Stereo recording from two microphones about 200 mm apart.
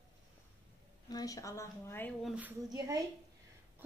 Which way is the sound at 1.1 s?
15° left (ahead or behind).